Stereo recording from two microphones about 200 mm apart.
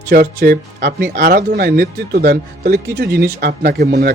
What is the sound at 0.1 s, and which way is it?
Speech, 45° right (ahead or behind).